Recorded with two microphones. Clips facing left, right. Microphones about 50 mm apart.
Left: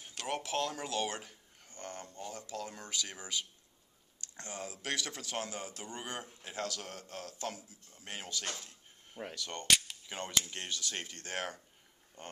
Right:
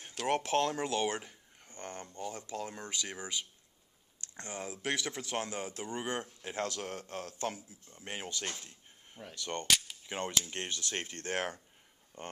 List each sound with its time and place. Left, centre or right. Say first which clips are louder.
0.3 s speech: right 5 dB; right
9.2 s speech: left 5 dB; centre
9.7 s speech: left 1 dB; centre
10.0 s a sound: right 4 dB; right
10.5 s speech: right 2 dB; right